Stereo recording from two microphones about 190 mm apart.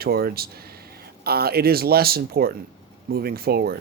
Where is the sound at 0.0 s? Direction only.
55° right (ahead or behind).